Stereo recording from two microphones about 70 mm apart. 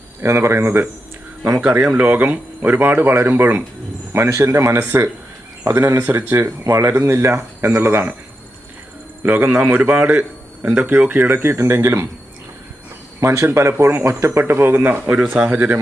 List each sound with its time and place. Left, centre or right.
0.2 s speech: right
1.6 s speech: centre
4.1 s speech: right
9.2 s a man's voice: right
13.1 s speech: right